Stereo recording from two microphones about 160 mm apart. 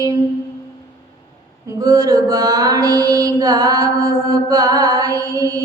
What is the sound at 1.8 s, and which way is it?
Mantra, 20° right (ahead or behind).